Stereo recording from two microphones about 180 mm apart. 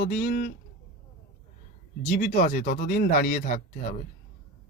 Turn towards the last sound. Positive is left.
turn(degrees=45)  # may be behind; listen again after turning